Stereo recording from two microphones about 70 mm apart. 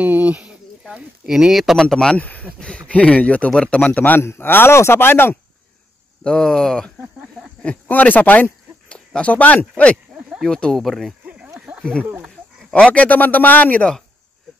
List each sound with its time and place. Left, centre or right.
0.0 s speech: right
1.2 s speech: centre
1.8 s speech: centre
2.1 s speech: left
4.2 s speech: left
6.2 s speech: centre
7.6 s speech: left
8.8 s speech: centre
10.4 s speech: centre
11.8 s speech: centre